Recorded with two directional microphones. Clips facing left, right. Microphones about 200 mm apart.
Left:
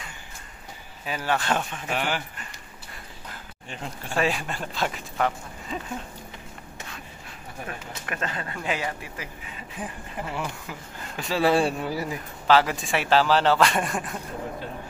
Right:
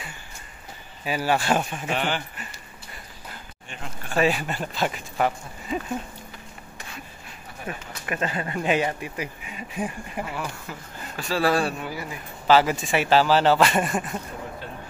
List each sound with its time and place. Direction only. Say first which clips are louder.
1.0 s speech: right 3 dB; 10° right (ahead or behind)
1.9 s a man's voice: left 1 dB; 5° left (ahead or behind)
4.1 s speech: right 3 dB; centre (ahead or behind)
7.7 s speech: right 5 dB; 5° right (ahead or behind)
8.5 s speech: right 8 dB; 20° right (ahead or behind)
10.7 s speech: right 1 dB; 15° left (ahead or behind)
12.4 s speech: right 2 dB; 5° right (ahead or behind)